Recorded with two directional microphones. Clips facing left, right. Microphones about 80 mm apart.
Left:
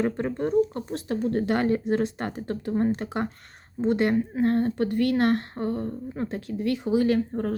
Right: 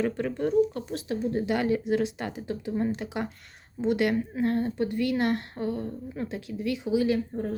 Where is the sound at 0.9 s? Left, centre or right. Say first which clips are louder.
Left 3 dB; left.